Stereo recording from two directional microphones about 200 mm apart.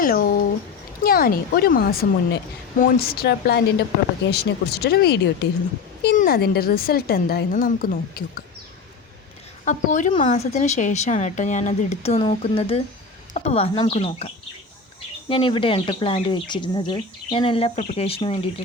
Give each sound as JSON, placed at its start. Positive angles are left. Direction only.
{"t": 0.0, "sound": "a sound", "side_deg": 45}
{"t": 1.0, "sound": "speech", "side_deg": 45}
{"t": 9.6, "sound": "speech", "side_deg": 40}
{"t": 15.3, "sound": "speech", "side_deg": 25}